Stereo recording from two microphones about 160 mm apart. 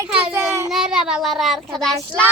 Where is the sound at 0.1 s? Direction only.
5° right (ahead or behind).